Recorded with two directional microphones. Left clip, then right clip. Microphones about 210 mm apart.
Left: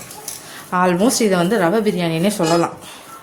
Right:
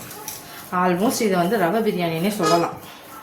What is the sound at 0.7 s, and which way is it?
A woman's voice, 50° left (ahead or behind).